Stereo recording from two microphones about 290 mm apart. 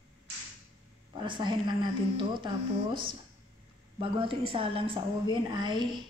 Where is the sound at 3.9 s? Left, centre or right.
Centre.